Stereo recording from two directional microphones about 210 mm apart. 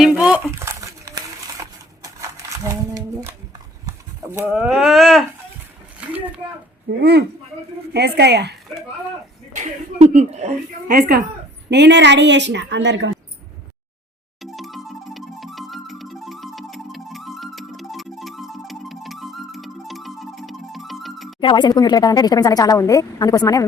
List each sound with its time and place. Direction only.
0.0 s crumpling: 5° right (ahead or behind)
3.8 s speech: 15° right (ahead or behind)
6.0 s a sound: 5° right (ahead or behind)
7.0 s speech: 50° right (ahead or behind)
9.6 s a woman's voice: 35° right (ahead or behind)
11.7 s a woman's voice: 55° right (ahead or behind)
14.4 s music: centre (ahead or behind)
21.4 s speech: 20° left (ahead or behind)